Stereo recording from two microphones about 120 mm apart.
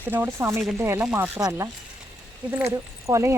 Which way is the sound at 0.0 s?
20° right (ahead or behind).